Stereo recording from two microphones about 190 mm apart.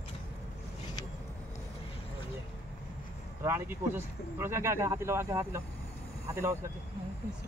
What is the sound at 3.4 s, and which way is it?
Speech, 15° right (ahead or behind).